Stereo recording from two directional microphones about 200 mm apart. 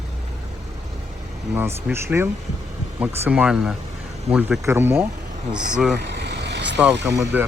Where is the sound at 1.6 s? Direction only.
10° right (ahead or behind).